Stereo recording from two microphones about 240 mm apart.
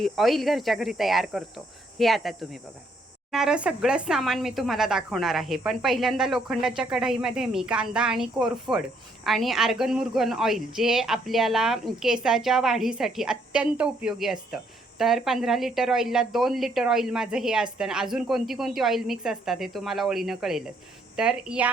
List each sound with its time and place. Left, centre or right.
0.0 s speech: centre